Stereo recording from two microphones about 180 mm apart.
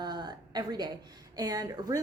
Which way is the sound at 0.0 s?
25° right (ahead or behind).